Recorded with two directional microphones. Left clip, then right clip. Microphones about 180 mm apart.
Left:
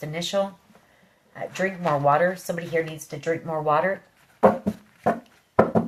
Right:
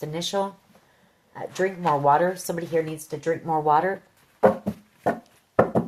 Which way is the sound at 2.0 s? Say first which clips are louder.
Left 1 dB; 55° right (ahead or behind).